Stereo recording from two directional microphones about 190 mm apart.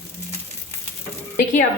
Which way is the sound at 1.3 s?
45° left (ahead or behind).